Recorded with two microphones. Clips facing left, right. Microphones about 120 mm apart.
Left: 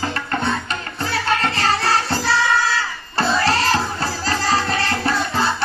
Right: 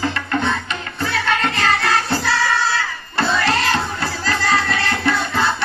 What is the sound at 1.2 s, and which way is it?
Music, 35° left (ahead or behind).